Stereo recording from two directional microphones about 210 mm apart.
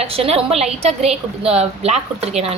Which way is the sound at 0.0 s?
30° right (ahead or behind).